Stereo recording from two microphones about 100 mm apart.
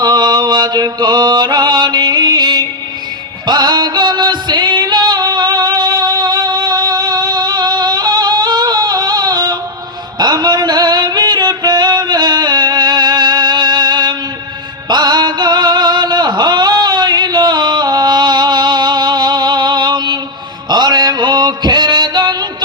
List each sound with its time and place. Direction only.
0.0 s music: 40° right (ahead or behind)